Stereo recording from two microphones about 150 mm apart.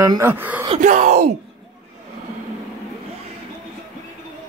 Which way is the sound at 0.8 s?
55° right (ahead or behind).